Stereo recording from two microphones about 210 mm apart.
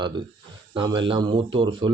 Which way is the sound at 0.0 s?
20° right (ahead or behind).